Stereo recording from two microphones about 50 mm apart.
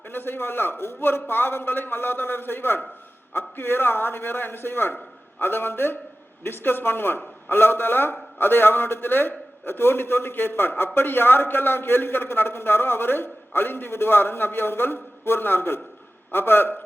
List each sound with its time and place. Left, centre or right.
0.1 s a man's voice: left